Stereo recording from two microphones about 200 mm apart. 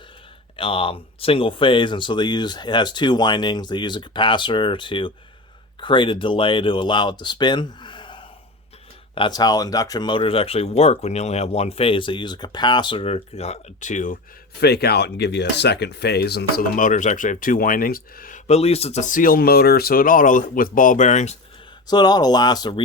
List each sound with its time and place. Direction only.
0.5 s speech: 25° left (ahead or behind)
14.6 s speech: 55° left (ahead or behind); by 21.3 s 35° left (ahead or behind)
21.8 s speech: 20° left (ahead or behind)